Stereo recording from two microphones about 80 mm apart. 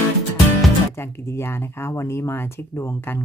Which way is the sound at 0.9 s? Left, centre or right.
Left.